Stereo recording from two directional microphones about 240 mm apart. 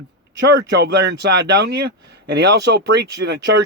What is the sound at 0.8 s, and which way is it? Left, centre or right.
Speech, right.